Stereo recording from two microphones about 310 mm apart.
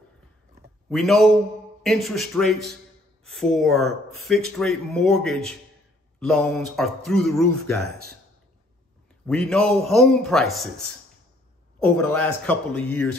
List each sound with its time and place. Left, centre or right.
0.8 s speech: centre
7.8 s speech: right
9.2 s speech: centre
12.0 s speech: centre